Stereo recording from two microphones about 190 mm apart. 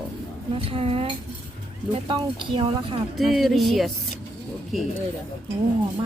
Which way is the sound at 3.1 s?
Centre (ahead or behind).